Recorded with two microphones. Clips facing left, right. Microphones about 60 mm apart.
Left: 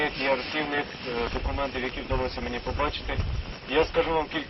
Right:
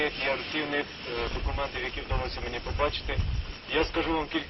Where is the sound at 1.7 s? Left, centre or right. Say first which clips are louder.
Left 4 dB; centre.